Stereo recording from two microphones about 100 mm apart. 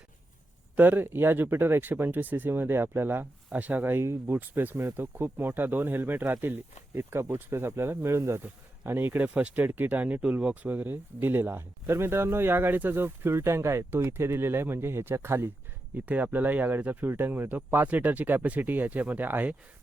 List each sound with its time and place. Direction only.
0.8 s speech: 20° right (ahead or behind)